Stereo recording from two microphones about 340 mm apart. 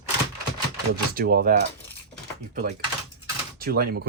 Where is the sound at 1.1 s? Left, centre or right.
Right.